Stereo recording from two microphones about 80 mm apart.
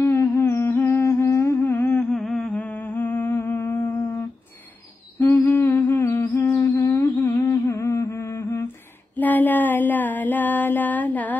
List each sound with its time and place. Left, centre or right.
0.0 s humming: left
2.0 s humming: centre
2.6 s humming: left
5.2 s humming: left
9.1 s a sound: left